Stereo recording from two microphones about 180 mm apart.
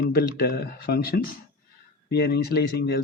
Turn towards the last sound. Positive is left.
turn(degrees=60)  # may be behind; listen again after turning